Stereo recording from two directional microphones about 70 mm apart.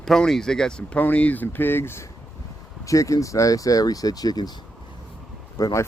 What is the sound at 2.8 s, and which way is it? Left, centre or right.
Speech, left.